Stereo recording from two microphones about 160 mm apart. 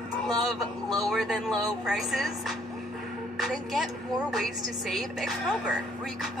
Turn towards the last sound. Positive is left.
turn(degrees=0)  # may be behind; listen again after turning